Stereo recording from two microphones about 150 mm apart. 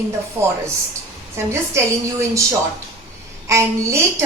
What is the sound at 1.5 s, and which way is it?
A woman's voice, 20° right (ahead or behind).